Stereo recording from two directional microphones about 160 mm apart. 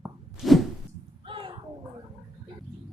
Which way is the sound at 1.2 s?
35° right (ahead or behind).